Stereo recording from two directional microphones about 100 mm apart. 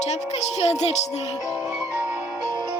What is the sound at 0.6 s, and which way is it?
Speech, 90° left.